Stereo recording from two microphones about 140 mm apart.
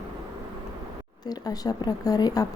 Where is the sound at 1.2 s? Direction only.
25° left (ahead or behind).